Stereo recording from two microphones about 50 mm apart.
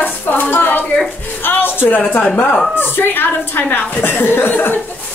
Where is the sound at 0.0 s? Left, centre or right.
Left.